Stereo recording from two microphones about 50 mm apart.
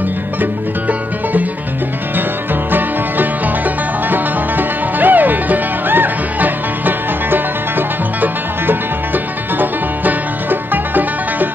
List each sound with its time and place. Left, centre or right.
0.4 s music: right
2.7 s music: right